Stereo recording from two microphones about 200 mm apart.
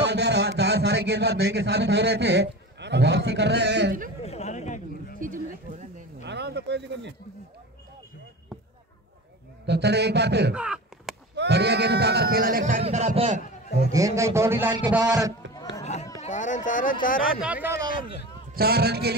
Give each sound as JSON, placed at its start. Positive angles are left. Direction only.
{"t": 0.0, "sound": "a man's voice", "side_deg": -55}
{"t": 4.2, "sound": "a sound", "side_deg": 30}
{"t": 5.2, "sound": "a sound", "side_deg": -40}
{"t": 6.2, "sound": "speech", "side_deg": -55}
{"t": 9.7, "sound": "a man's voice", "side_deg": -55}
{"t": 10.5, "sound": "a sound", "side_deg": -5}
{"t": 11.3, "sound": "speech", "side_deg": -55}
{"t": 13.9, "sound": "a man's voice", "side_deg": -15}
{"t": 15.8, "sound": "a sound", "side_deg": 35}
{"t": 16.2, "sound": "speech", "side_deg": 40}
{"t": 17.4, "sound": "a man's voice", "side_deg": -10}
{"t": 18.5, "sound": "speech", "side_deg": -50}